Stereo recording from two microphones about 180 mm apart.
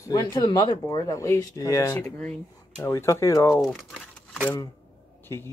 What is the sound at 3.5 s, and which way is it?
Crumpling, centre (ahead or behind).